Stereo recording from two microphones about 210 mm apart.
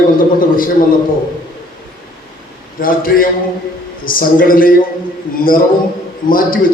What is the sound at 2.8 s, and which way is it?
Speech, 40° left (ahead or behind).